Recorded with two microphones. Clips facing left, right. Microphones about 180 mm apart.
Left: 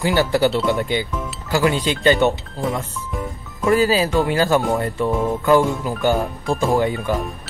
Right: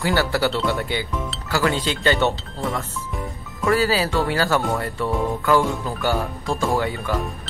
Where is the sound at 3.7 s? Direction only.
20° left (ahead or behind).